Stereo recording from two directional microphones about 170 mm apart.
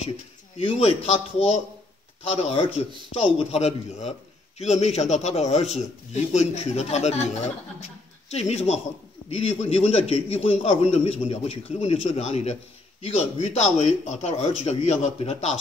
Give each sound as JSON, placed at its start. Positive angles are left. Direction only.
{"t": 0.6, "sound": "a man's voice", "side_deg": 35}